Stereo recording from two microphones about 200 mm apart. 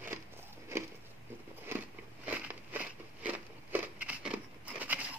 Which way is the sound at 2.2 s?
10° right (ahead or behind).